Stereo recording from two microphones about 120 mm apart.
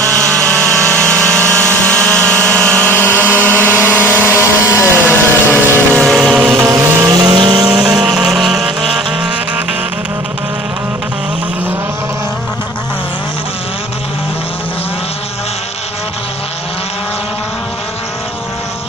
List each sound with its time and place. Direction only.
0.2 s vehicle: 5° left (ahead or behind)
2.5 s a sound: 10° left (ahead or behind)
5.9 s vehicle: 5° left (ahead or behind)
6.5 s vehicle: 25° right (ahead or behind)
7.3 s vehicle: 40° right (ahead or behind)
7.7 s vehicle: 5° right (ahead or behind)